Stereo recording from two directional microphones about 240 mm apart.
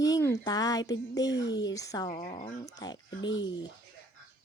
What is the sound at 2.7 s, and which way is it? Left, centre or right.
Speech, centre.